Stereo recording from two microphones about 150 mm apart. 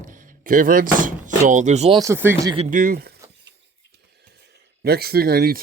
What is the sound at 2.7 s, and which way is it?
Speech, 70° right (ahead or behind).